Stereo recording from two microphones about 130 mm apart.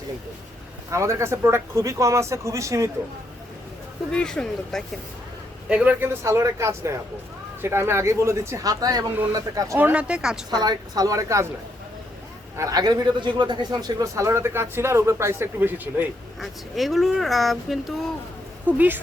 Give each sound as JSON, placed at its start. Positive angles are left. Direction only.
{"t": 0.9, "sound": "a man's voice", "side_deg": -20}
{"t": 4.1, "sound": "speech", "side_deg": 5}
{"t": 5.6, "sound": "a man's voice", "side_deg": -10}
{"t": 9.7, "sound": "speech", "side_deg": -10}
{"t": 10.5, "sound": "a man's voice", "side_deg": -30}
{"t": 12.5, "sound": "a man's voice", "side_deg": -30}
{"t": 16.4, "sound": "speech", "side_deg": 0}
{"t": 18.6, "sound": "speech", "side_deg": -15}